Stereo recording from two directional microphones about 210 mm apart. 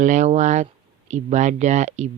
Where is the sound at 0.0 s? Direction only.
35° right (ahead or behind).